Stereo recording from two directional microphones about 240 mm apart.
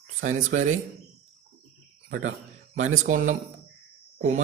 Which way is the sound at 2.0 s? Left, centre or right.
Right.